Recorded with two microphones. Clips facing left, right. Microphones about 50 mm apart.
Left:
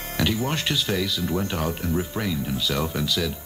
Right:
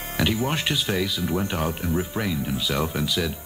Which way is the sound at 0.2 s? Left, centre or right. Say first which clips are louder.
Right 1 dB; centre.